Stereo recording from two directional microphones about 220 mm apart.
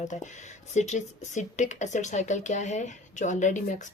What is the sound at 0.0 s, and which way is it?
Speech, 35° left (ahead or behind).